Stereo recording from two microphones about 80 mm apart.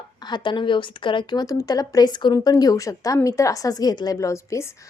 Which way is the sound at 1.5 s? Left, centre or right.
Left.